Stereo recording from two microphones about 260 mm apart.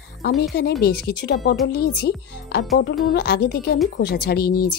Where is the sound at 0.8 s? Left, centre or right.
Left.